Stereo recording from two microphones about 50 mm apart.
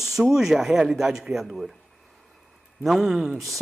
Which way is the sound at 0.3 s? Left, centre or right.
Centre.